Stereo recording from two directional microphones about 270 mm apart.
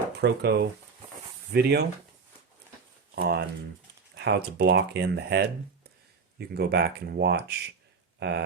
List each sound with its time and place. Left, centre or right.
0.2 s speech: right
3.2 s speech: right
6.5 s speech: right